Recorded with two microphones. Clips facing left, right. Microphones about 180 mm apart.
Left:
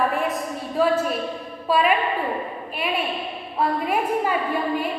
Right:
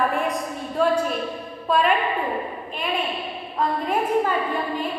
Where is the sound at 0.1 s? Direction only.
Centre (ahead or behind).